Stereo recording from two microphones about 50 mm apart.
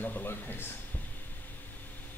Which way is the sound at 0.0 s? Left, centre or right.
Left.